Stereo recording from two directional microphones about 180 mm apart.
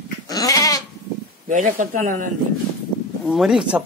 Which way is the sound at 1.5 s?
45° right (ahead or behind).